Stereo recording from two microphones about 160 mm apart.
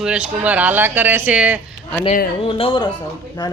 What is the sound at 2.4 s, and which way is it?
Speech, 35° left (ahead or behind).